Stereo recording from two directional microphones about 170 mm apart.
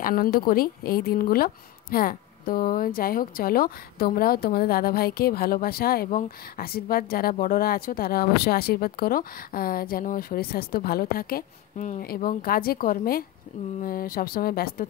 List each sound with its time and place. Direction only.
0.0 s a woman's voice: 60° left (ahead or behind)